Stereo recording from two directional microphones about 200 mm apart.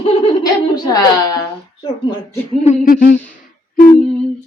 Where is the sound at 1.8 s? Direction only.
20° left (ahead or behind).